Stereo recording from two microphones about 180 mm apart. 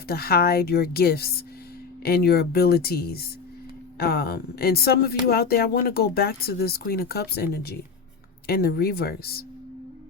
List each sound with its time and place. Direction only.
0.1 s speech: 60° left (ahead or behind)